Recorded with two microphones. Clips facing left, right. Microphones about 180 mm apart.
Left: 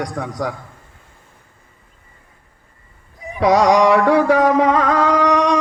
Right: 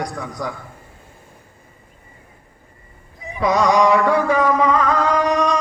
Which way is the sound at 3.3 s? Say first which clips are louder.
Left 3 dB; 85° left.